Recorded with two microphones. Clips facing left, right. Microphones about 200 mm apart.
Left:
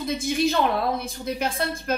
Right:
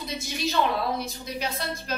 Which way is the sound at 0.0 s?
50° left (ahead or behind).